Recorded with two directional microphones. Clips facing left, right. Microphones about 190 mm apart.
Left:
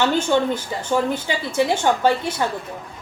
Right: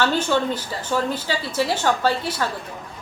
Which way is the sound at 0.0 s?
20° left (ahead or behind).